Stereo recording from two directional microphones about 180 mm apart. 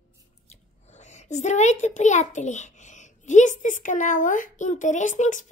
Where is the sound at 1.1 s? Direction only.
40° left (ahead or behind).